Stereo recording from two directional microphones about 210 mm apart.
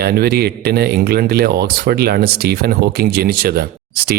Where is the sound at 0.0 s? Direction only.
45° right (ahead or behind).